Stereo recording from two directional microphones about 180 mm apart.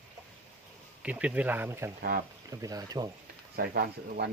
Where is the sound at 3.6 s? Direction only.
55° right (ahead or behind).